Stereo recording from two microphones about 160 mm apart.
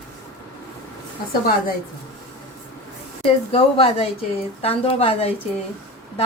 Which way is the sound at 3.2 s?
35° left (ahead or behind).